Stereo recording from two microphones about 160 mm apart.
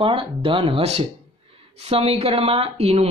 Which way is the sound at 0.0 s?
35° right (ahead or behind).